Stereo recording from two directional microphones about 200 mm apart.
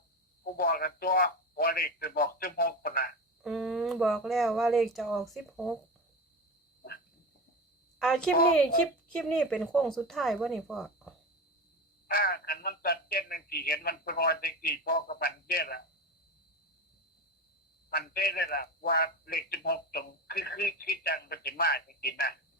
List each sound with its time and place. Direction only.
0.5 s a man's voice: 45° left (ahead or behind)
3.4 s speech: centre (ahead or behind)
8.0 s speech: centre (ahead or behind)
12.0 s speech: 45° left (ahead or behind)
17.9 s a man's voice: 50° left (ahead or behind)